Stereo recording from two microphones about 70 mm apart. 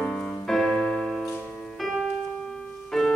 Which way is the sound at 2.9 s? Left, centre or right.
Centre.